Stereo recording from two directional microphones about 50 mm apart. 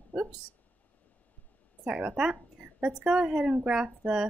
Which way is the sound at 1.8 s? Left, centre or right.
Right.